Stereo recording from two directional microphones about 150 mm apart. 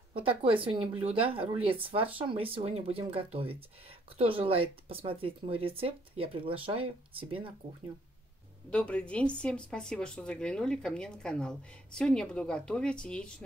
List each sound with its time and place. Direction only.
0.4 s speech: 35° right (ahead or behind)
8.6 s speech: 10° left (ahead or behind)